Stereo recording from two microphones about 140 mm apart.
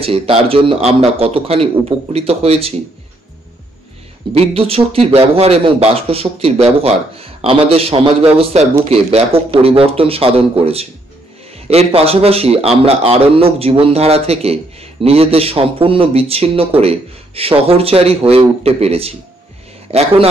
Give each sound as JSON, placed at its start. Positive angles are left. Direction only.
{"t": 0.0, "sound": "a man's voice", "side_deg": -45}
{"t": 4.3, "sound": "a man's voice", "side_deg": -45}